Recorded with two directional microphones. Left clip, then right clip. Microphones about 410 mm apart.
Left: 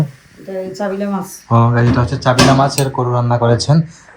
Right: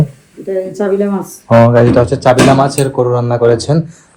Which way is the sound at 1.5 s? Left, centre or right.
Right.